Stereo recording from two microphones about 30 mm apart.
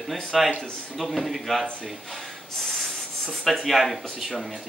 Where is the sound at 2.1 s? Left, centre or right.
Centre.